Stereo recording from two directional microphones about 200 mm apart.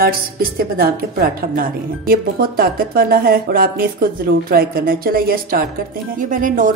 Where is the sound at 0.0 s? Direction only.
50° right (ahead or behind).